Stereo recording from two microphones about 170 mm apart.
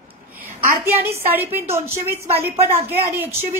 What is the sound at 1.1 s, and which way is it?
A woman's voice, 15° right (ahead or behind).